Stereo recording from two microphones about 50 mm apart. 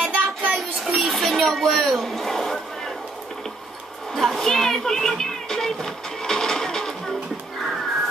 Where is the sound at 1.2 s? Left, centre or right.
Centre.